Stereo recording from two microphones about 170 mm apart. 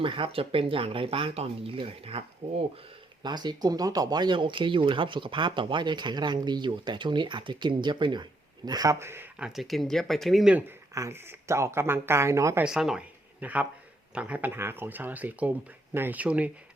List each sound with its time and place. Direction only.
0.0 s speech: 30° right (ahead or behind)
3.2 s speech: 25° right (ahead or behind); by 10.6 s centre (ahead or behind)
10.9 s speech: 15° right (ahead or behind)
12.6 s speech: 5° right (ahead or behind)